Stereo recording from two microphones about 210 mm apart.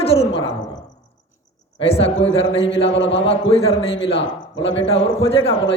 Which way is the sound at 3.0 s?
60° left (ahead or behind).